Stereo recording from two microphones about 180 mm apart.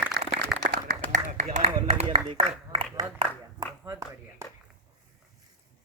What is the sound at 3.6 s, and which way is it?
Speech, 20° right (ahead or behind).